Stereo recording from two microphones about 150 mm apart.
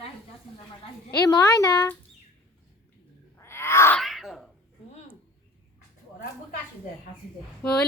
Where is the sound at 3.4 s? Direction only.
15° left (ahead or behind).